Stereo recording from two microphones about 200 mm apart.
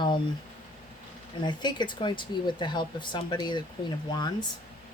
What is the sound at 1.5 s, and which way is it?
Speech, 20° left (ahead or behind).